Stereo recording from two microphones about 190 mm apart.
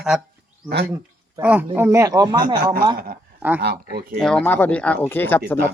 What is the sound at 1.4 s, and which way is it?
Speech, 10° right (ahead or behind).